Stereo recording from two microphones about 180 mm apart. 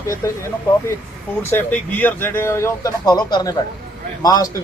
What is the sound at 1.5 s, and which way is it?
A man's voice, 10° left (ahead or behind).